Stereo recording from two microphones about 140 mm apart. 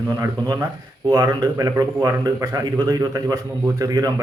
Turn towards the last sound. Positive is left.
turn(degrees=-25)  # may be behind; listen again after turning